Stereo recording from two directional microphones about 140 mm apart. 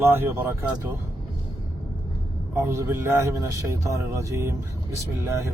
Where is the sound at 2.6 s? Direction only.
15° right (ahead or behind).